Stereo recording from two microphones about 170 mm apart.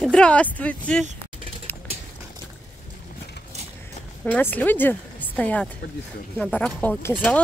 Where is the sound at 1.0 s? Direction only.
35° right (ahead or behind).